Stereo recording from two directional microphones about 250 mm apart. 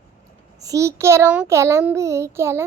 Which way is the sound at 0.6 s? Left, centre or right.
Centre.